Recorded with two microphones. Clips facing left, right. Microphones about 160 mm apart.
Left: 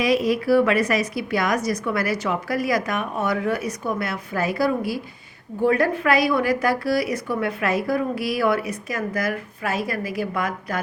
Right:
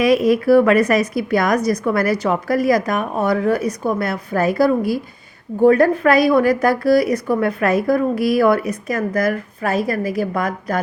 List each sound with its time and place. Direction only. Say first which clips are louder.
0.0 s a woman's voice: right 6 dB; 55° right (ahead or behind)